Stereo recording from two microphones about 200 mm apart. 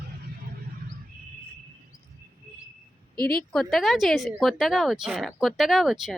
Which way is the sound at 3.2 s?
50° left (ahead or behind).